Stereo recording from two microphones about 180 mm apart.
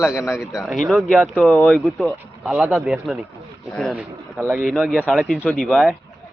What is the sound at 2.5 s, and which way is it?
Speech, 5° right (ahead or behind).